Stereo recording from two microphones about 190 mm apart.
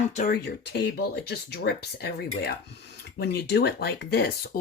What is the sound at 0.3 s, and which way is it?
Speech, 60° left (ahead or behind).